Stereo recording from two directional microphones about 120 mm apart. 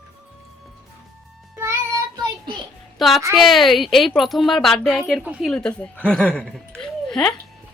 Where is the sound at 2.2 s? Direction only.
40° right (ahead or behind).